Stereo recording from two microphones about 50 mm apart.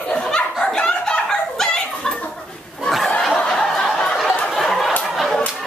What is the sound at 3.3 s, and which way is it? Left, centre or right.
Snicker, centre.